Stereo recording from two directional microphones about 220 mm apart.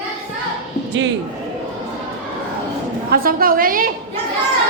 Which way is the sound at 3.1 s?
40° right (ahead or behind).